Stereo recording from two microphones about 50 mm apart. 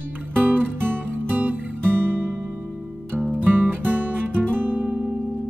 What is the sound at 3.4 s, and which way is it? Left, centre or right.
Music, right.